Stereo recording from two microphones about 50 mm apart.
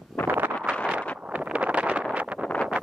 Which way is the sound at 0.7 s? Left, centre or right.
Right.